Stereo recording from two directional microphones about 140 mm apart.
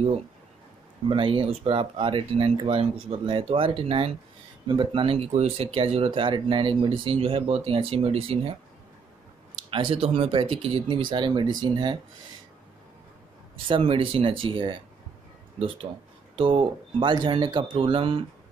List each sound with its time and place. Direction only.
1.0 s speech: 40° right (ahead or behind)
9.7 s speech: 40° right (ahead or behind)
13.7 s speech: 40° right (ahead or behind)
16.3 s speech: 40° right (ahead or behind)